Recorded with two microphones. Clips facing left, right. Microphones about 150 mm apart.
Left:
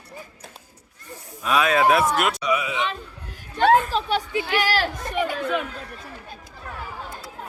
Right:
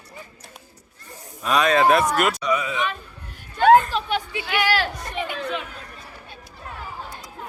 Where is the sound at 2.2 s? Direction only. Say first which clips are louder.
Right 1 dB; centre (ahead or behind).